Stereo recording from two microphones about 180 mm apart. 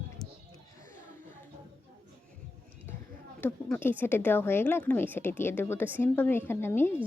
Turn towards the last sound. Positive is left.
turn(degrees=15)  # may be behind; listen again after turning